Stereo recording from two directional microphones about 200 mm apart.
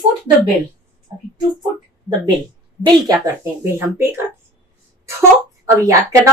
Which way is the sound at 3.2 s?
15° right (ahead or behind).